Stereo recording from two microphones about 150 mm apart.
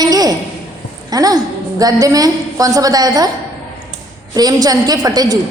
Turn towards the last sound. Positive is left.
turn(degrees=-25)  # may be behind; listen again after turning